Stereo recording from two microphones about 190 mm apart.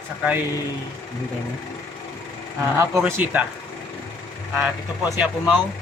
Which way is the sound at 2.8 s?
10° right (ahead or behind).